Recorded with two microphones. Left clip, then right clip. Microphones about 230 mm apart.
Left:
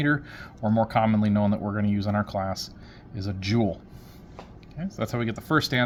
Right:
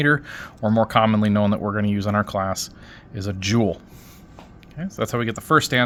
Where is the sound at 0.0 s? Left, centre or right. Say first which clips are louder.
Right 6 dB; right.